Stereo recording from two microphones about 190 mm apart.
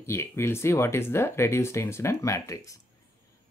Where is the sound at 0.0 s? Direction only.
15° left (ahead or behind).